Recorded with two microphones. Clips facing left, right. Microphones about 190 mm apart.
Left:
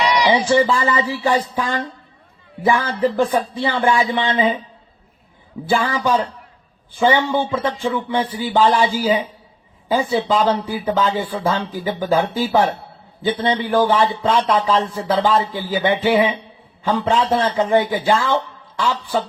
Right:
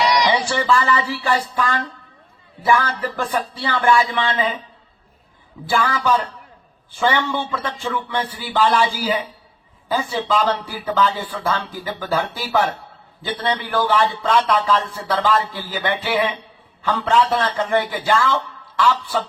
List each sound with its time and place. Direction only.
0.2 s a man's voice: 15° left (ahead or behind)
5.6 s a man's voice: 15° left (ahead or behind)